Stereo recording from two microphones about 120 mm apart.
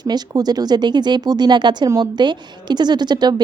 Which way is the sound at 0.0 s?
35° right (ahead or behind).